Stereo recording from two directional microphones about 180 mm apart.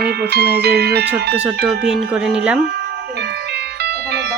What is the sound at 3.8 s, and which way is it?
Music, 70° right (ahead or behind).